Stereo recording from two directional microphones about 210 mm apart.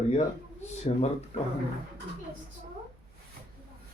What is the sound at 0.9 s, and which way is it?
Speech, 25° left (ahead or behind).